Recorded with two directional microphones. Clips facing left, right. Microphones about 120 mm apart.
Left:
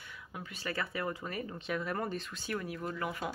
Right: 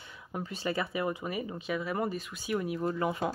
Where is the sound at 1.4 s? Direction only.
5° right (ahead or behind); by 3.3 s 25° right (ahead or behind).